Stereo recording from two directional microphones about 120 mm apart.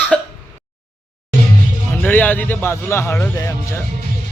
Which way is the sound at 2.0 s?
15° left (ahead or behind).